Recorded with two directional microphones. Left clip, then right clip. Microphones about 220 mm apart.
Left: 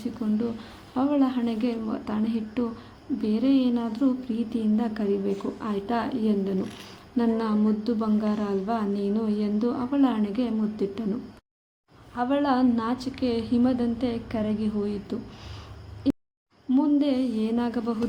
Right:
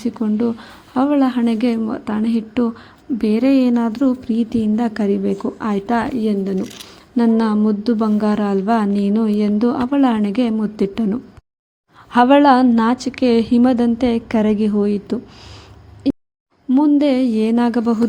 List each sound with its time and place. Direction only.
0.0 s a woman's voice: 35° right (ahead or behind)
16.0 s hoot: 35° right (ahead or behind)
16.6 s a woman's voice: 35° right (ahead or behind)